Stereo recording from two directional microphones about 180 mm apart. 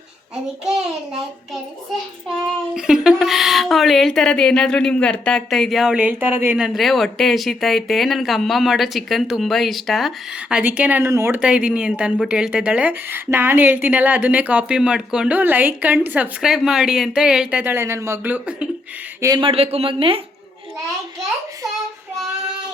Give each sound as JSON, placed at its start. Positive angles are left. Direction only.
{"t": 2.7, "sound": "speech", "side_deg": -5}
{"t": 6.7, "sound": "speech", "side_deg": 0}
{"t": 19.2, "sound": "speech", "side_deg": -25}